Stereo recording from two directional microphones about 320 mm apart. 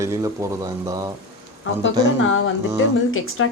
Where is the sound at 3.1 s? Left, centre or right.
Left.